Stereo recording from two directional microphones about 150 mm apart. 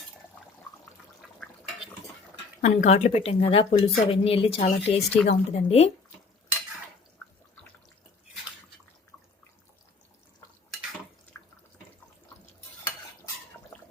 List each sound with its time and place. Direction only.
2.6 s speech: 50° left (ahead or behind)